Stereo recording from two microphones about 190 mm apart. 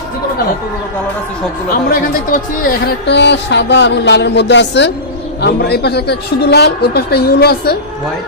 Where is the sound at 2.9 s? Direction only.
65° left (ahead or behind).